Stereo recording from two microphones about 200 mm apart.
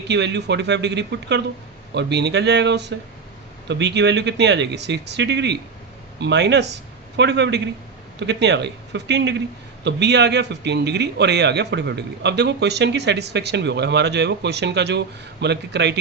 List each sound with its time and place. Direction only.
0.1 s a man's voice: 60° right (ahead or behind)